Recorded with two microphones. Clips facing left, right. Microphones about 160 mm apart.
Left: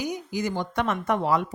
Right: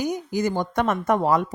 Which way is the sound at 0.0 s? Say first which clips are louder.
Right 4 dB; 45° right (ahead or behind).